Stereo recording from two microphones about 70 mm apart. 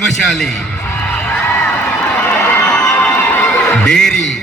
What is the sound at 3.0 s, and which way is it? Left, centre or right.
Music, left.